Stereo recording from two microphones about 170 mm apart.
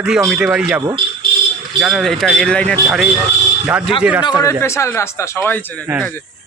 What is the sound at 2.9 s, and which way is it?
Speech, 5° right (ahead or behind).